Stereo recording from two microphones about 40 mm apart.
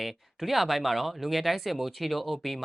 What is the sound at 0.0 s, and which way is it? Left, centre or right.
Speech, centre.